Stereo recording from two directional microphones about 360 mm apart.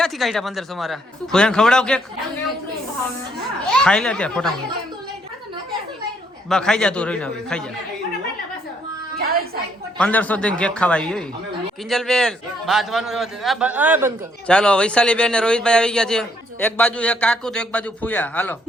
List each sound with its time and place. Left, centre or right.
0.0 s a man's voice: centre
3.7 s speech: centre
6.5 s a man's voice: centre
9.2 s a sound: right
10.0 s a man's voice: centre